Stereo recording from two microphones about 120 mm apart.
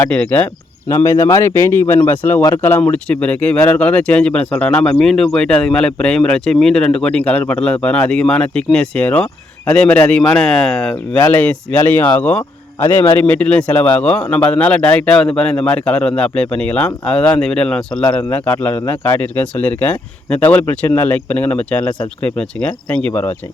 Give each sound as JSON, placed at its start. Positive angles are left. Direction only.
{"t": 0.1, "sound": "speech", "side_deg": 15}
{"t": 0.9, "sound": "speech", "side_deg": 25}